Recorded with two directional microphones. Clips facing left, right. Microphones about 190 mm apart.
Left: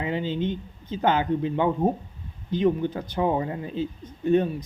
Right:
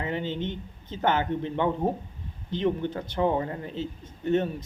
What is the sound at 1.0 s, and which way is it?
A man's voice, 15° left (ahead or behind).